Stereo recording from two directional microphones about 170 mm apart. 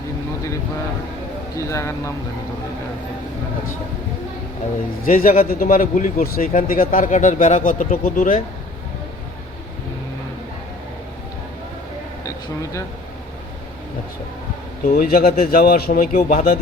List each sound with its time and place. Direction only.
1.5 s speech: 15° left (ahead or behind)
5.0 s speech: 55° left (ahead or behind)
14.8 s speech: 55° left (ahead or behind)